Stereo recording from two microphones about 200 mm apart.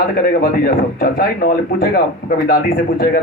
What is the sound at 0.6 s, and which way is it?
Speech, 50° left (ahead or behind).